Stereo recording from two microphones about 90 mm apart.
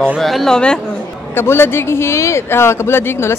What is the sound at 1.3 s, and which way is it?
Speech, 25° left (ahead or behind).